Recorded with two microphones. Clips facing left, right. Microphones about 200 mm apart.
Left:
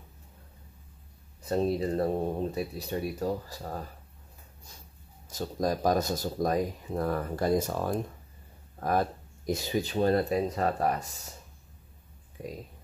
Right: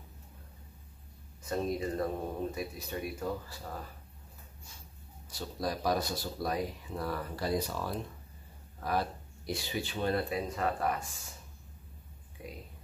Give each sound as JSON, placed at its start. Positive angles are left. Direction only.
{"t": 1.4, "sound": "speech", "side_deg": 35}
{"t": 5.3, "sound": "speech", "side_deg": 45}